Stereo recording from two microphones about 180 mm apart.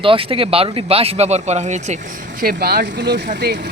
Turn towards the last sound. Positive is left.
turn(degrees=-60)  # may be behind; listen again after turning